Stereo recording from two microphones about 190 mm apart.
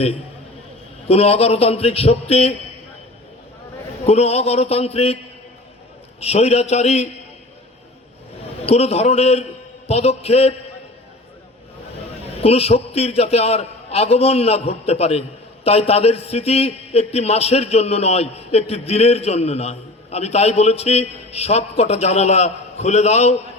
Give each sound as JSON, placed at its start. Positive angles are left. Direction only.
{"t": 1.0, "sound": "a man's voice", "side_deg": 30}
{"t": 4.0, "sound": "a man's voice", "side_deg": 35}
{"t": 6.1, "sound": "a man's voice", "side_deg": 35}
{"t": 8.6, "sound": "a man's voice", "side_deg": 35}
{"t": 12.4, "sound": "a man's voice", "side_deg": 30}